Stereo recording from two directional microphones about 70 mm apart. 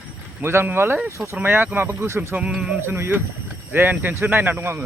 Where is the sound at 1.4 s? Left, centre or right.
Right.